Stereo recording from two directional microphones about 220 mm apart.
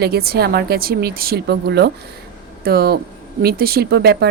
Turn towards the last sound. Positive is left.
turn(degrees=-50)  # may be behind; listen again after turning